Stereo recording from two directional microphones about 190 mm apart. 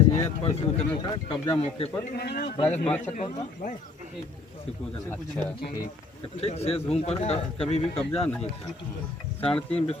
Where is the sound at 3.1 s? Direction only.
40° left (ahead or behind).